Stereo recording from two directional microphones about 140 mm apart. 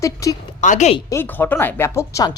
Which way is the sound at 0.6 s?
60° left (ahead or behind).